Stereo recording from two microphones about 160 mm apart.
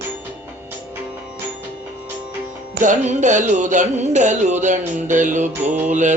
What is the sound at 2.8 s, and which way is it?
Music, 50° right (ahead or behind).